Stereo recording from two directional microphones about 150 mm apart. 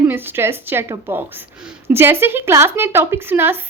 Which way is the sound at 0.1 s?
15° right (ahead or behind).